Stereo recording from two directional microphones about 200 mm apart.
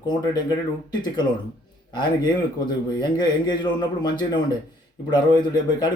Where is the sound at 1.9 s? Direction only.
20° left (ahead or behind).